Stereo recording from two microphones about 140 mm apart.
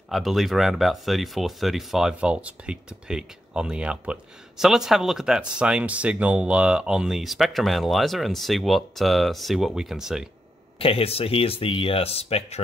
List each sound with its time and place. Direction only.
0.1 s speech: centre (ahead or behind)
10.8 s speech: 40° left (ahead or behind)